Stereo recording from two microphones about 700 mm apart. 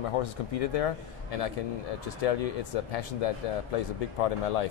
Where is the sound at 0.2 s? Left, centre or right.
Left.